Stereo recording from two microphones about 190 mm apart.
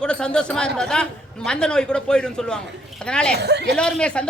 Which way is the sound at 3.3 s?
60° right (ahead or behind).